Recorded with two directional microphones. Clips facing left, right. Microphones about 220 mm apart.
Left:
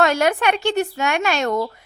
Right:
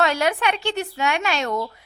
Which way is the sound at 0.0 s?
50° left (ahead or behind).